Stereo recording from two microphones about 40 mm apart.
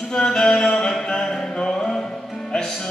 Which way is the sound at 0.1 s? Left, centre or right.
Centre.